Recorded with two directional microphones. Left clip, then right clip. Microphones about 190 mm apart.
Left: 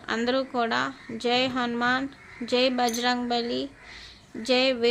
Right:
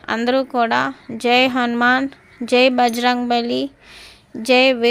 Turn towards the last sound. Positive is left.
turn(degrees=-40)  # may be behind; listen again after turning